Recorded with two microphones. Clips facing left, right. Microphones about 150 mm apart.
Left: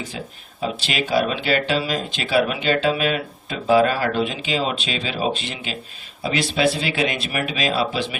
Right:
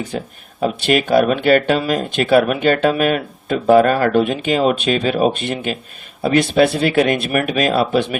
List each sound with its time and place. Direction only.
0.1 s speech: 50° right (ahead or behind)